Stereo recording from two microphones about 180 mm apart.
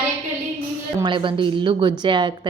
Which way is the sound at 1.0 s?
25° right (ahead or behind).